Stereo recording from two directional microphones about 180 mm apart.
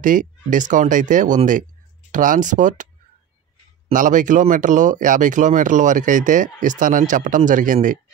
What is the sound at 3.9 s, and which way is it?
Speech, 45° right (ahead or behind).